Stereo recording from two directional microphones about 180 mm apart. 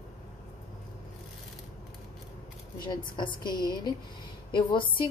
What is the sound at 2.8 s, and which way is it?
A woman's voice, 25° left (ahead or behind).